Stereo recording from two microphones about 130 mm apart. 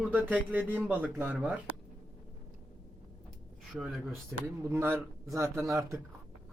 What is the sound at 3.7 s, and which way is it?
Speech, 5° right (ahead or behind).